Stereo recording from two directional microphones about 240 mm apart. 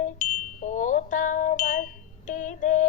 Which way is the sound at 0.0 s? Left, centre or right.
Left.